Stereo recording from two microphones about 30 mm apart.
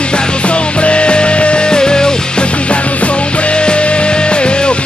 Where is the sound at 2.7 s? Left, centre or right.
Left.